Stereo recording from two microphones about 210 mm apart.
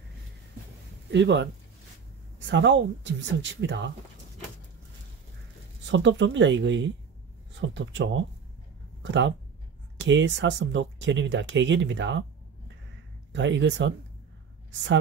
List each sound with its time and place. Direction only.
1.1 s speech: 55° right (ahead or behind)
5.9 s speech: 60° right (ahead or behind)
9.9 s speech: 60° right (ahead or behind)
13.3 s speech: 60° right (ahead or behind)